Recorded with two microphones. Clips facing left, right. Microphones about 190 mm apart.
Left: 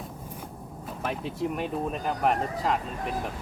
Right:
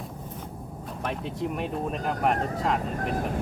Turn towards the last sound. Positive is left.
turn(degrees=0)  # may be behind; listen again after turning